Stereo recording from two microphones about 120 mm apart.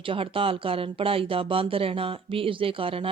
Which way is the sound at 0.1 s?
50° right (ahead or behind).